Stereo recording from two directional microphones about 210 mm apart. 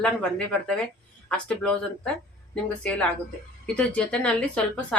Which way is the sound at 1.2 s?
5° left (ahead or behind).